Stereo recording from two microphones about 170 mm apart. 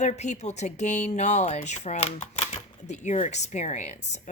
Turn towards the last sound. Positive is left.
turn(degrees=40)  # may be behind; listen again after turning